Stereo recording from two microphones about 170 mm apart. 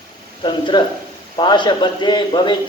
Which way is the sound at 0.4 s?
25° left (ahead or behind).